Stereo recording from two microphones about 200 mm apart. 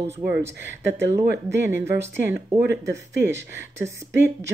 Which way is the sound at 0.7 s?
65° right (ahead or behind).